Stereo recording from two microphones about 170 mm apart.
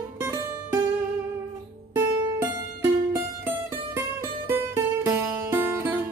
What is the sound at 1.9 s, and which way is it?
Music, 10° right (ahead or behind).